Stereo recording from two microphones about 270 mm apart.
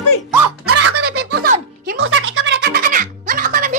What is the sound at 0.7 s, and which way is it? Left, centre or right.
Music, right.